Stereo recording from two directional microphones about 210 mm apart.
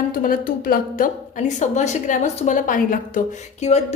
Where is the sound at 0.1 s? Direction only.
40° left (ahead or behind).